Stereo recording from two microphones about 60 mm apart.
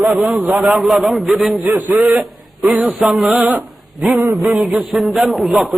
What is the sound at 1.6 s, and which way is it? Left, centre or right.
Speech, right.